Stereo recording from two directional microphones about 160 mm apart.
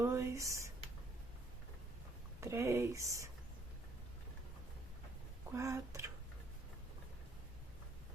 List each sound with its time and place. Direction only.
0.0 s speech: 15° right (ahead or behind)
2.4 s speech: 15° right (ahead or behind)
5.5 s speech: 20° right (ahead or behind)